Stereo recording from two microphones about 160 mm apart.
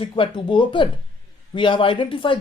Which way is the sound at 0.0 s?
30° left (ahead or behind).